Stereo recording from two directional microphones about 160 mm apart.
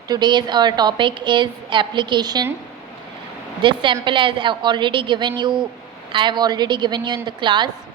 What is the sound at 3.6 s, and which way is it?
Mantra, 30° right (ahead or behind).